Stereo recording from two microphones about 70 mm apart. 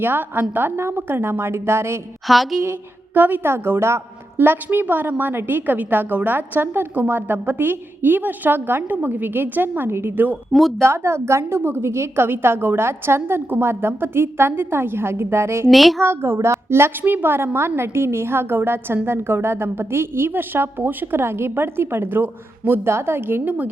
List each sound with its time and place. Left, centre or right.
0.0 s a woman's voice: right
2.2 s a woman's voice: centre
3.2 s a woman's voice: right
10.8 s a woman's voice: right
15.7 s a woman's voice: centre
16.0 s a woman's voice: right